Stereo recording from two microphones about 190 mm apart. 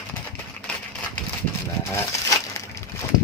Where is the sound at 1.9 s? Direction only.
15° left (ahead or behind).